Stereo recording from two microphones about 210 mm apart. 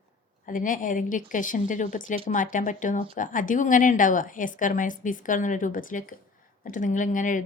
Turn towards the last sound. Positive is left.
turn(degrees=40)  # may be behind; listen again after turning